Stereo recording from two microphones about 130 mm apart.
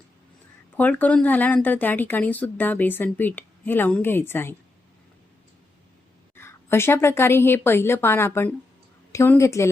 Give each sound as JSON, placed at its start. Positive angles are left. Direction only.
{"t": 0.8, "sound": "speech", "side_deg": 10}
{"t": 6.3, "sound": "a woman's voice", "side_deg": 20}